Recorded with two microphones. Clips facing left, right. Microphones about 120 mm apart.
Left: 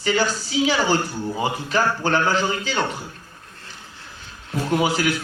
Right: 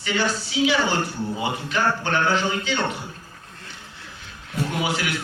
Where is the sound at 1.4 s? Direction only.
35° left (ahead or behind).